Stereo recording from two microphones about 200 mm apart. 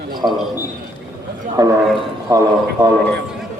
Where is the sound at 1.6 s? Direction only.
15° right (ahead or behind).